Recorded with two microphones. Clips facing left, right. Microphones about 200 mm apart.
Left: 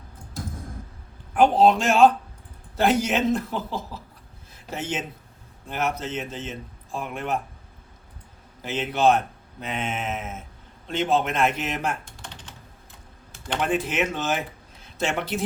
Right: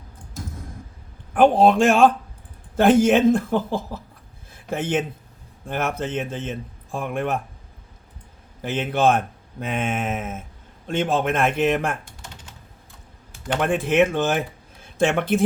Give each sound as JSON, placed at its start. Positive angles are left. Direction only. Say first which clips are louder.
{"t": 1.4, "sound": "speech", "louder": "right 3 dB", "side_deg": -55}
{"t": 8.6, "sound": "speech", "louder": "right 1 dB", "side_deg": -50}
{"t": 13.6, "sound": "speech", "louder": "right 6 dB", "side_deg": -55}